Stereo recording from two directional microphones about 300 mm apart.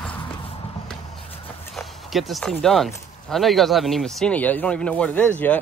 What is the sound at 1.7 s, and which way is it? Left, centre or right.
Speech, centre.